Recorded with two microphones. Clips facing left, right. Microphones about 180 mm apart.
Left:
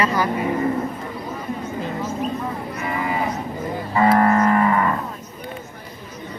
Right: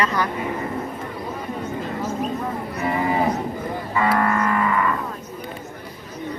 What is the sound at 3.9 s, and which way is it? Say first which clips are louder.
Music: left 5 dB; 35° left (ahead or behind).